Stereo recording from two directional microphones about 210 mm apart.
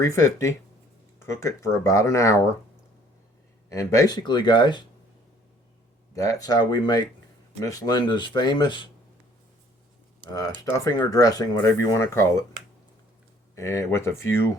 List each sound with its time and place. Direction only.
0.0 s speech: 15° left (ahead or behind)
3.7 s speech: 15° left (ahead or behind)
6.1 s speech: 15° left (ahead or behind)
10.2 s speech: 15° left (ahead or behind)
13.6 s speech: 15° left (ahead or behind)